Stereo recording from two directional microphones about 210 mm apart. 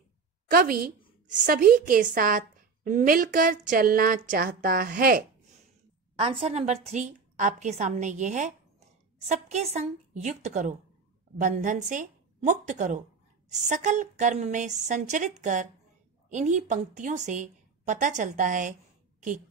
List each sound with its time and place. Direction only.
0.5 s a woman's voice: 45° right (ahead or behind)
6.1 s a woman's voice: 25° right (ahead or behind)